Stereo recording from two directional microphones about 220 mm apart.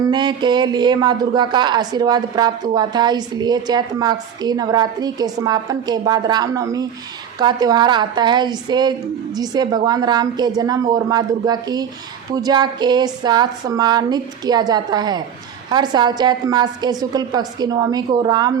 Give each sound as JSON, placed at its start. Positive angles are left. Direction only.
{"t": 0.1, "sound": "a woman's voice", "side_deg": -20}